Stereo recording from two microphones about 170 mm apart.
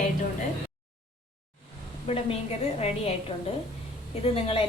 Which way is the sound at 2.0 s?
35° left (ahead or behind).